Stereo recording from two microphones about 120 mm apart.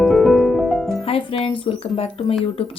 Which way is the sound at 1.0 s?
50° left (ahead or behind).